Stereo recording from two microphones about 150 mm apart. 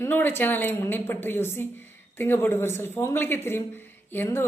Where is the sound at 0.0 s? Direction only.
15° left (ahead or behind).